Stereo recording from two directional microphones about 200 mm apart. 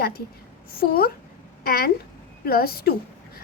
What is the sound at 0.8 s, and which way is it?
A woman's voice, 50° left (ahead or behind).